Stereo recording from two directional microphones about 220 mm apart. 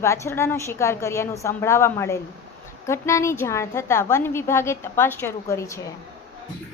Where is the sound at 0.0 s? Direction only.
15° left (ahead or behind).